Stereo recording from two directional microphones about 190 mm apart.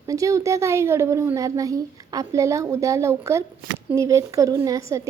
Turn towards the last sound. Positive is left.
turn(degrees=-15)  # may be behind; listen again after turning